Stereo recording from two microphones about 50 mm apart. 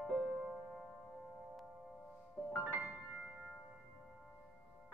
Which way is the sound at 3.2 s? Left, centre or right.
Centre.